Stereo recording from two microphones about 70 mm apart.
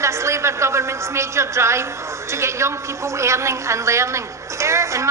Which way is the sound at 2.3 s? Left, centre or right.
Right.